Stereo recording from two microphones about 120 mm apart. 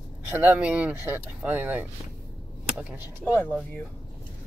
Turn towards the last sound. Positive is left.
turn(degrees=-10)  # may be behind; listen again after turning